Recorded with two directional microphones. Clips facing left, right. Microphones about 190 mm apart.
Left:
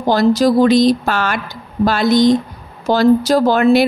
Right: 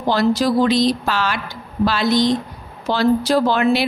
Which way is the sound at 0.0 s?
45° left (ahead or behind).